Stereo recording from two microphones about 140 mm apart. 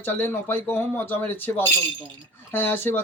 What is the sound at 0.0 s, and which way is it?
Speech, 15° left (ahead or behind).